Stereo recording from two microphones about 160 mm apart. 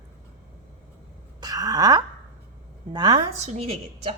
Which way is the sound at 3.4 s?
45° right (ahead or behind).